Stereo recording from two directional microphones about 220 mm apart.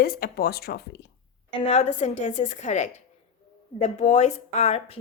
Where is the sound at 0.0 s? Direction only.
45° left (ahead or behind).